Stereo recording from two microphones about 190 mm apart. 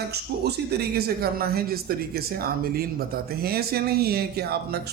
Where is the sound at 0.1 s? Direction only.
60° right (ahead or behind).